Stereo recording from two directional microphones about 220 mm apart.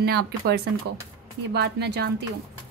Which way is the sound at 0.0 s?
45° right (ahead or behind).